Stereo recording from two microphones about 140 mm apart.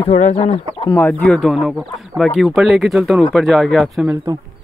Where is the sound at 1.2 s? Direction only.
5° left (ahead or behind).